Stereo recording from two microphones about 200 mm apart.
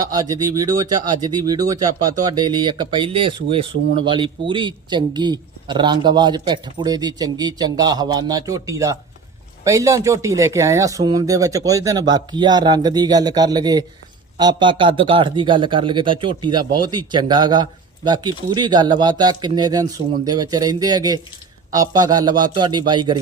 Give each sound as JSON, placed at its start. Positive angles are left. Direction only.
{"t": 0.0, "sound": "speech", "side_deg": -20}